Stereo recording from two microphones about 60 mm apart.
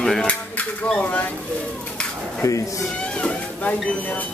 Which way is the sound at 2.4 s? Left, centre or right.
Left.